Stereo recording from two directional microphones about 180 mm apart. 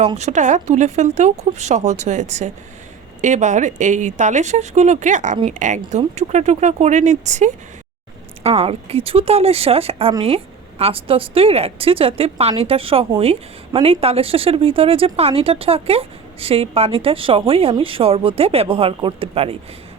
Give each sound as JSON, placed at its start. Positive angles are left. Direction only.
{"t": 0.2, "sound": "speech", "side_deg": -40}